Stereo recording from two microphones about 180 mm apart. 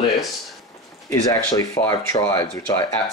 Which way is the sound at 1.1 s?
20° left (ahead or behind).